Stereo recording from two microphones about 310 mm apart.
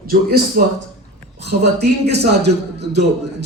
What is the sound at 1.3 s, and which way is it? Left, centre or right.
A man's voice, right.